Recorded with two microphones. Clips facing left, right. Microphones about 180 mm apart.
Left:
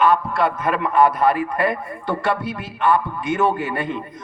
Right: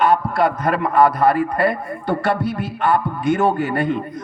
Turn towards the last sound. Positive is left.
turn(degrees=-40)  # may be behind; listen again after turning